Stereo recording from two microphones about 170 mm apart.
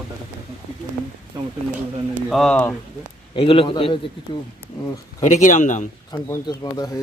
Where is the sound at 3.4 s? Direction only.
30° left (ahead or behind).